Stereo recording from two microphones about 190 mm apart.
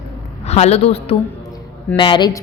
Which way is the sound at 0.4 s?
35° left (ahead or behind).